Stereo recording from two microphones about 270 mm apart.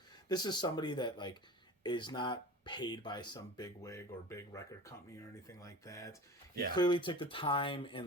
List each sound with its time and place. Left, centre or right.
0.3 s speech: centre